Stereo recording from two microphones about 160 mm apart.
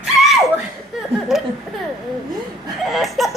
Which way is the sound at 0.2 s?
Centre (ahead or behind).